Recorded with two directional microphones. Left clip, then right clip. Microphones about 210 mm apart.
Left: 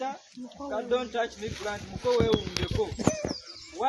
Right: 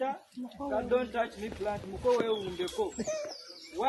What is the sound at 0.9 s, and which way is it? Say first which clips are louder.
Speech: left 3 dB; 15° left (ahead or behind).